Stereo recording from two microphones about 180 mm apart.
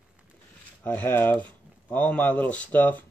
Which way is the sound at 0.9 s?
10° left (ahead or behind).